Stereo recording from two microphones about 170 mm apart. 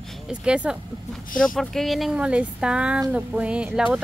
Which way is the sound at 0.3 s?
5° right (ahead or behind).